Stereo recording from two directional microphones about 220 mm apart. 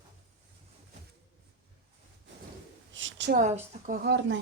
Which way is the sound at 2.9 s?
55° right (ahead or behind).